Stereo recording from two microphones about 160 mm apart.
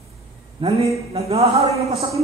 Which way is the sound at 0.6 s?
35° right (ahead or behind).